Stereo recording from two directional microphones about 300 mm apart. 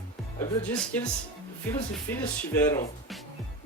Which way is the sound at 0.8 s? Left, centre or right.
Centre.